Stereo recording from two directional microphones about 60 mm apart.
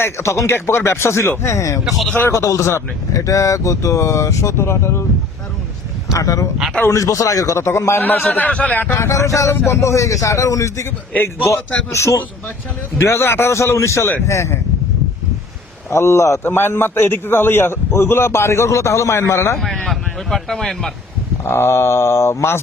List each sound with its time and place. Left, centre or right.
0.0 s a man's voice: left
6.1 s speech: left
7.6 s a man's voice: left
8.0 s a man's voice: left
8.9 s speech: left
9.5 s speech: left
11.9 s a man's voice: left
15.9 s a man's voice: left
16.5 s a man's voice: left
19.5 s speech: centre
21.4 s a man's voice: left